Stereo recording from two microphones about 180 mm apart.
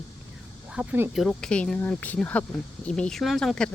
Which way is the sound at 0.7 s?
5° right (ahead or behind).